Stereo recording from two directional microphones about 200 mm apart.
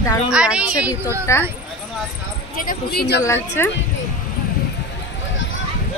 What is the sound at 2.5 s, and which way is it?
Speech, 50° left (ahead or behind).